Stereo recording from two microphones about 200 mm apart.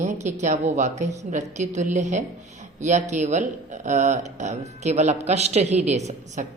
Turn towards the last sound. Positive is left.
turn(degrees=-35)  # may be behind; listen again after turning